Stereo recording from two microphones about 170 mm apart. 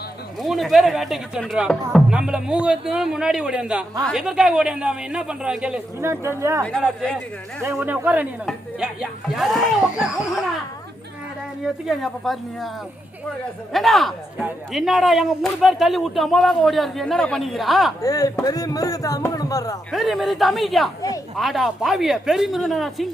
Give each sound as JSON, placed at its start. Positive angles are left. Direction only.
{"t": 0.4, "sound": "speech", "side_deg": 0}
{"t": 6.7, "sound": "speech", "side_deg": 5}
{"t": 7.8, "sound": "speech", "side_deg": -10}
{"t": 11.6, "sound": "speech", "side_deg": 0}
{"t": 13.7, "sound": "speech", "side_deg": 0}
{"t": 18.0, "sound": "speech", "side_deg": 20}
{"t": 19.9, "sound": "speech", "side_deg": 0}